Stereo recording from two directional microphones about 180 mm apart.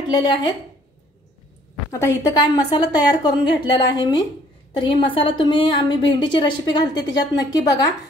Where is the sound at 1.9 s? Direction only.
20° left (ahead or behind).